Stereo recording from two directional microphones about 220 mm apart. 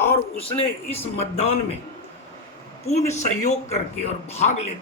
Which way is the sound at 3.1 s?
30° left (ahead or behind).